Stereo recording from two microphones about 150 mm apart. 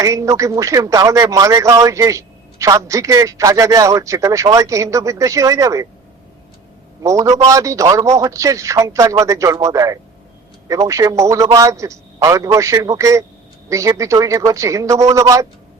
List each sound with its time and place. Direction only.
0.0 s a man's voice: 20° right (ahead or behind)
7.0 s a man's voice: 20° right (ahead or behind)